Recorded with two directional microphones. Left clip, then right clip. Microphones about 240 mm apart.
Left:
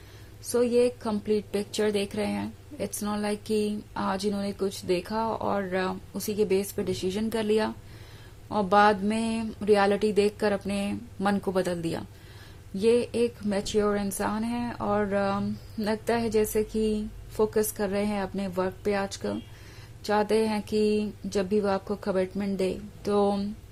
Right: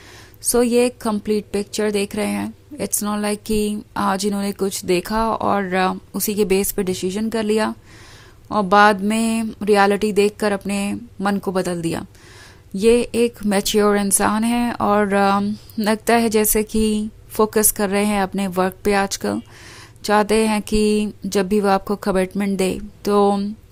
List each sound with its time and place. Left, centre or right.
0.5 s a woman's voice: right